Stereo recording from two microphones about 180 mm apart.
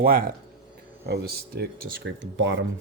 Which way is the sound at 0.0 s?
55° right (ahead or behind).